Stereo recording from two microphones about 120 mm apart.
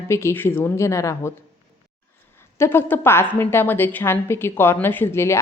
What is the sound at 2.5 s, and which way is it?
A woman's voice, 20° left (ahead or behind).